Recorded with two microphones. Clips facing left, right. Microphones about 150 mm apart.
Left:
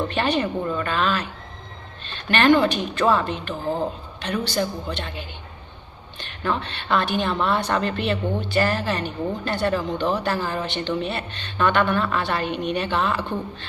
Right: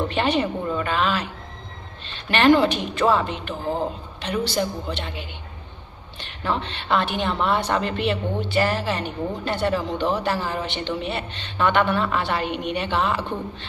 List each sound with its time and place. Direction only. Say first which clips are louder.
0.1 s a woman's voice: right 1 dB; 25° right (ahead or behind)
2.6 s a woman's voice: even; 25° right (ahead or behind)
6.4 s a woman's voice: even; 25° right (ahead or behind)